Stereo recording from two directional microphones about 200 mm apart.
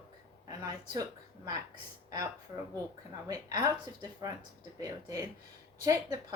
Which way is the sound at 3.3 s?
20° right (ahead or behind).